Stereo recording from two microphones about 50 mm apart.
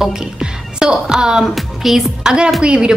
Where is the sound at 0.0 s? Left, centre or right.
Centre.